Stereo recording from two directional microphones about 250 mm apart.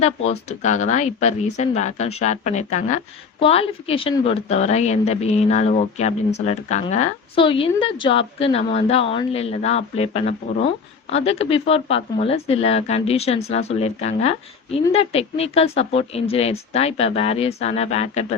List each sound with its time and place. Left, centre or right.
0.3 s a woman's voice: left